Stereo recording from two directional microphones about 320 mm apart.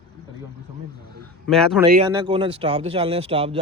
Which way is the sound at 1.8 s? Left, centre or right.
Centre.